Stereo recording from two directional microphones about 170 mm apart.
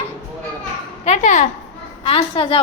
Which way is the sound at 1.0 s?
45° left (ahead or behind).